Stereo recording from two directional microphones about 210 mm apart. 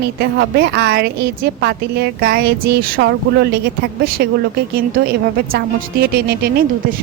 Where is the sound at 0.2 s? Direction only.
50° right (ahead or behind).